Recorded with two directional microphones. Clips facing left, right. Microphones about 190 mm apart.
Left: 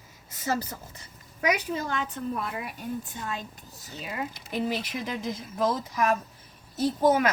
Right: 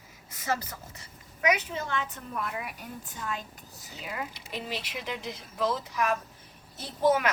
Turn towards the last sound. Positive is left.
turn(degrees=40)  # may be behind; listen again after turning